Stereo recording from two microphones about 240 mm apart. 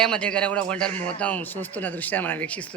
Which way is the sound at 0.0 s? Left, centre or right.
Centre.